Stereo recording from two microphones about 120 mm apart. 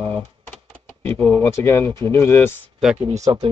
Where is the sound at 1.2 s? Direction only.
10° left (ahead or behind).